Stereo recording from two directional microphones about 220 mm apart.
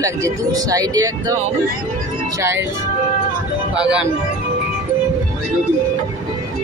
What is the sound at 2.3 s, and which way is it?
Speech, 10° right (ahead or behind).